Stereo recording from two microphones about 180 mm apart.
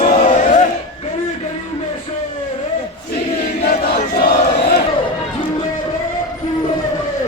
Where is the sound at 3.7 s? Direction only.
55° left (ahead or behind).